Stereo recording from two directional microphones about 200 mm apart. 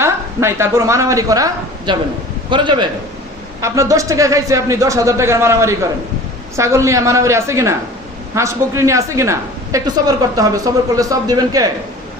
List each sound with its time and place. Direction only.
0.0 s a woman's voice: 15° right (ahead or behind)